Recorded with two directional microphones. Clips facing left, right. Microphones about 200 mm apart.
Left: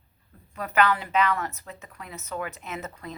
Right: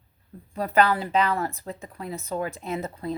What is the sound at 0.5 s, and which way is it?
A woman's voice, 35° right (ahead or behind).